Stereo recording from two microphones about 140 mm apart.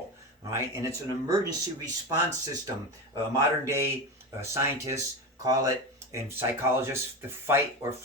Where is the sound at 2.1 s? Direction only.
20° right (ahead or behind).